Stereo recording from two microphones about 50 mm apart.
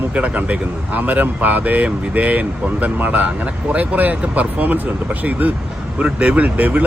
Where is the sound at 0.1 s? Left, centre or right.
Right.